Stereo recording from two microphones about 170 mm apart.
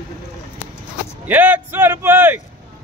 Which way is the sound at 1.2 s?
10° right (ahead or behind).